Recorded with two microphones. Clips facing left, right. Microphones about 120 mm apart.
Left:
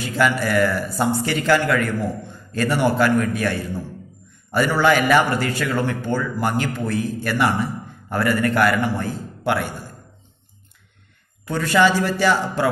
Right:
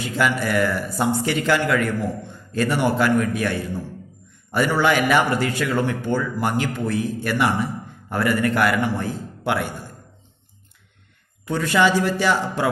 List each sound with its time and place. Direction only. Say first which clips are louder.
0.0 s a man's voice: left 2 dB; 20° right (ahead or behind)
11.4 s speech: left 1 dB; 20° right (ahead or behind)